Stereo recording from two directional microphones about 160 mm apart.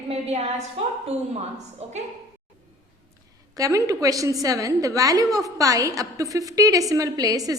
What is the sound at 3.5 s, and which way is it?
A woman's voice, 20° right (ahead or behind).